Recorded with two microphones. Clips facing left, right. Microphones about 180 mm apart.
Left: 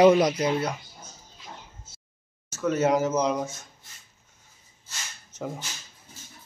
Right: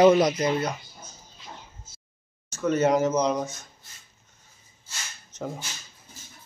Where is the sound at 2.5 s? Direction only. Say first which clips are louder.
Right 1 dB; 5° left (ahead or behind).